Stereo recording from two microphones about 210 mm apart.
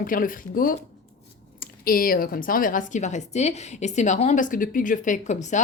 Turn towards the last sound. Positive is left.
turn(degrees=35)  # may be behind; listen again after turning